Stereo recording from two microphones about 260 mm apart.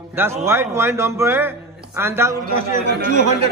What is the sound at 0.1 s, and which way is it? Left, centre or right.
A man's voice, centre.